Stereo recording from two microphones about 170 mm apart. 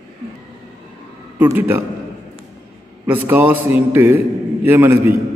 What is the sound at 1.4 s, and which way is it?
Speech, 10° right (ahead or behind).